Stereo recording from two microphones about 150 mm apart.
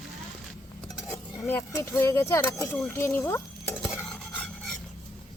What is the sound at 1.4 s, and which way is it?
Speech, 15° left (ahead or behind).